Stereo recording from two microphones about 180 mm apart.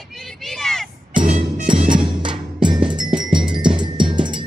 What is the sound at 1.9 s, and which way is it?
Music, 25° right (ahead or behind).